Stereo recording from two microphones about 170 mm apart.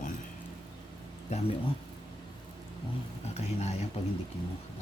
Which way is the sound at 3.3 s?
40° left (ahead or behind).